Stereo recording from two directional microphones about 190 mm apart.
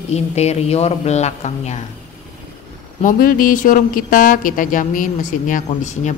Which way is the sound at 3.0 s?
45° left (ahead or behind).